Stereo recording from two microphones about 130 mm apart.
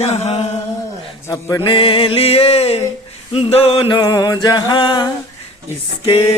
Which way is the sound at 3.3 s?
45° left (ahead or behind).